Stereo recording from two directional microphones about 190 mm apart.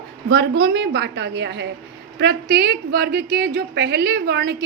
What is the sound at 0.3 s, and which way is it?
A woman's voice, 65° right (ahead or behind).